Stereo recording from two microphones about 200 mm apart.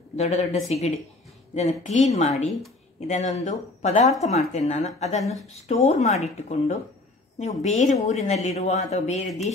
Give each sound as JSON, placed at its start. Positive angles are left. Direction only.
{"t": 0.1, "sound": "speech", "side_deg": 35}